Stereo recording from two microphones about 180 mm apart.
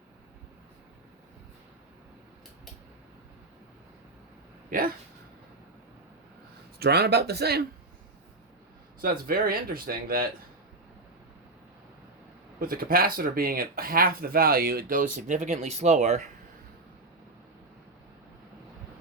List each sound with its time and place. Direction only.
4.7 s speech: 55° right (ahead or behind)
6.7 s speech: 65° right (ahead or behind)
9.0 s speech: 55° right (ahead or behind)
12.5 s speech: 55° right (ahead or behind)